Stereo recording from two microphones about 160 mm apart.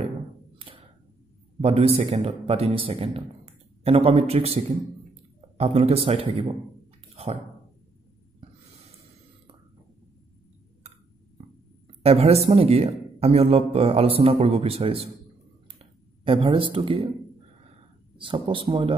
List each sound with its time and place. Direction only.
0.6 s a sound: 35° right (ahead or behind)
1.6 s speech: 40° right (ahead or behind)
12.0 s a woman's voice: 40° right (ahead or behind)
18.1 s speech: 30° right (ahead or behind)